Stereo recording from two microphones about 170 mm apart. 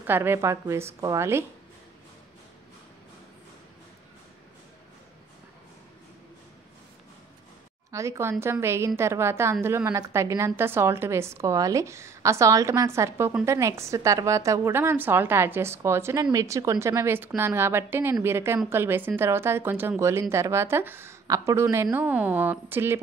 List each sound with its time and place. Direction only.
0.0 s a woman's voice: 10° right (ahead or behind)
7.9 s a woman's voice: 20° right (ahead or behind)